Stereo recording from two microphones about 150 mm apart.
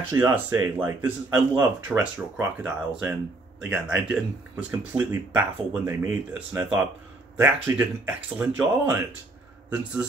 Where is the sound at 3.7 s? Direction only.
5° right (ahead or behind).